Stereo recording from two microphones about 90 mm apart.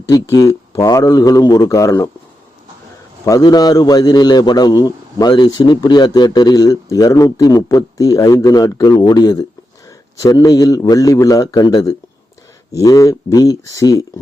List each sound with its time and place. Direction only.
0.3 s a man's voice: 45° left (ahead or behind)
3.4 s a man's voice: 50° left (ahead or behind)